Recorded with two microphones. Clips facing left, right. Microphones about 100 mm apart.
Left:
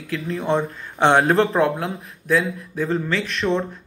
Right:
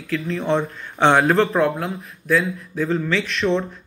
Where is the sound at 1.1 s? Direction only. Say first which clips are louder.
Even; 30° left (ahead or behind).